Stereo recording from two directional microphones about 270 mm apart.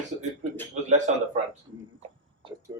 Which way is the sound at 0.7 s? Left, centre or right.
Right.